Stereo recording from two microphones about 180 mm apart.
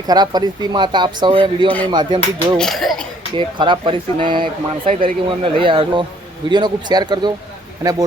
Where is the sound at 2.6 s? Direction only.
Centre (ahead or behind).